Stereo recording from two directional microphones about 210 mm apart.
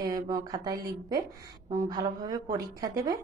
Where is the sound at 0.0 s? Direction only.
20° right (ahead or behind).